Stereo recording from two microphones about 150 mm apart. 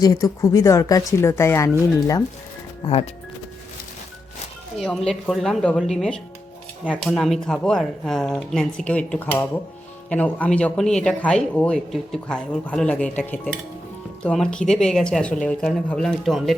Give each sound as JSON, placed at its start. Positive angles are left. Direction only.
{"t": 0.0, "sound": "speech", "side_deg": 25}
{"t": 4.8, "sound": "speech", "side_deg": 5}